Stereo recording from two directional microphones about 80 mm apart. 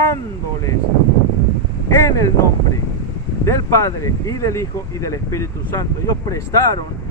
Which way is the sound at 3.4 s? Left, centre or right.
Left.